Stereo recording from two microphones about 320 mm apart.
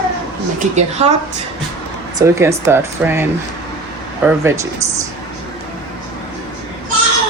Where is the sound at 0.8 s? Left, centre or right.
Right.